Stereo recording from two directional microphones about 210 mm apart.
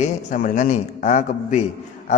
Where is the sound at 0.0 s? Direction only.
40° left (ahead or behind).